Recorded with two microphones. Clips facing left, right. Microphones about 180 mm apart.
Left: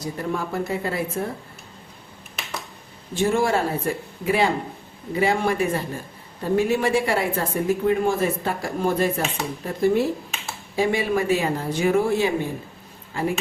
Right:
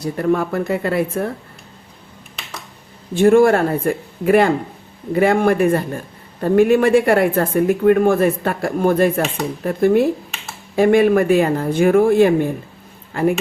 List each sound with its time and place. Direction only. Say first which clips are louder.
0.0 s a woman's voice: right 9 dB; 60° right (ahead or behind)
3.2 s a woman's voice: right 9 dB; 55° right (ahead or behind)